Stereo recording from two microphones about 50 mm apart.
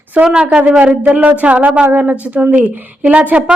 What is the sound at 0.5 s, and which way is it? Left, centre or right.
Speech, right.